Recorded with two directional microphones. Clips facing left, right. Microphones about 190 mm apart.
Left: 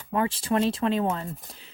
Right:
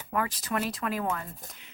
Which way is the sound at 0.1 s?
25° left (ahead or behind).